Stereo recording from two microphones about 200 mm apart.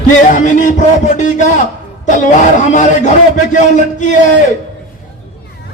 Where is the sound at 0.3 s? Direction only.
40° left (ahead or behind).